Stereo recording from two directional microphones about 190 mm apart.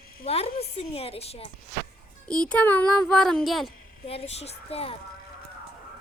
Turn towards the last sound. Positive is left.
turn(degrees=30)  # may be behind; listen again after turning